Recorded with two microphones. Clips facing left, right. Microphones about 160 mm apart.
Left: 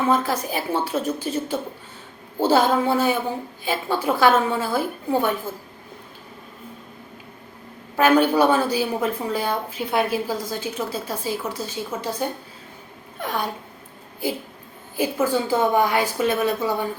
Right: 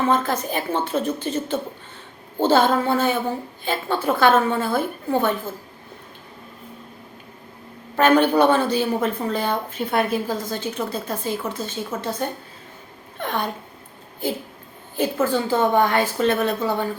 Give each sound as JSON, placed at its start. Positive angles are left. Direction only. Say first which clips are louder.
{"t": 0.1, "sound": "a woman's voice", "louder": "even", "side_deg": 10}
{"t": 7.9, "sound": "a woman's voice", "louder": "right 1 dB", "side_deg": 10}